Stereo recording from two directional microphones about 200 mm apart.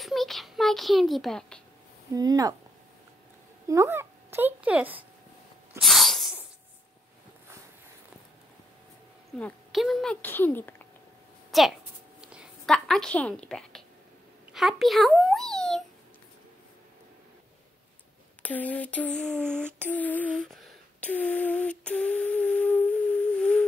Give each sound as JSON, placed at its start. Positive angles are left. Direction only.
{"t": 0.0, "sound": "a child's voice", "side_deg": 0}
{"t": 2.1, "sound": "speech", "side_deg": -20}
{"t": 3.6, "sound": "a woman's voice", "side_deg": -15}
{"t": 5.8, "sound": "sneeze", "side_deg": 0}
{"t": 9.4, "sound": "speech", "side_deg": 0}
{"t": 11.5, "sound": "speech", "side_deg": 0}
{"t": 12.2, "sound": "a sound", "side_deg": -5}
{"t": 14.5, "sound": "a child's voice", "side_deg": 0}
{"t": 18.4, "sound": "a sound", "side_deg": 10}